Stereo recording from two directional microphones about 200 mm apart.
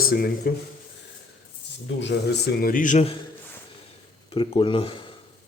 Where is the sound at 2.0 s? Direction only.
55° left (ahead or behind); by 3.1 s 35° left (ahead or behind).